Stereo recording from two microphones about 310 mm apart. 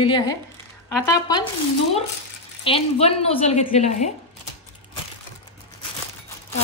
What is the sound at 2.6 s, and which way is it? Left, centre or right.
A woman's voice, centre.